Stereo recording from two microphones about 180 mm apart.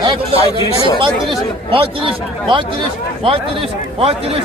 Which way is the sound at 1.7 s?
30° right (ahead or behind).